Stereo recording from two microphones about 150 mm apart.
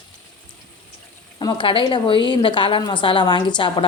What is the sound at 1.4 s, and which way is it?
Speech, 30° left (ahead or behind).